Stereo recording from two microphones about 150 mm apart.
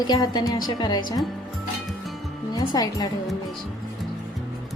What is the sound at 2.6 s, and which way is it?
Speech, 25° left (ahead or behind).